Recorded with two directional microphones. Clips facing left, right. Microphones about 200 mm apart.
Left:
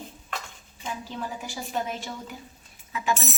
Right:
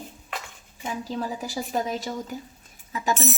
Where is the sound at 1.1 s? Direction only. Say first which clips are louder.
Right 5 dB; 40° right (ahead or behind).